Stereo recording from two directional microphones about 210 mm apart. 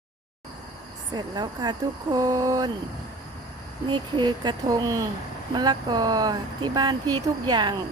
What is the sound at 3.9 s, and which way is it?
Speech, 20° right (ahead or behind).